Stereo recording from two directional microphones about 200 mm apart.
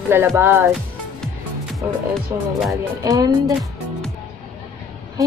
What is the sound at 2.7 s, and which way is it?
Speech, 15° right (ahead or behind).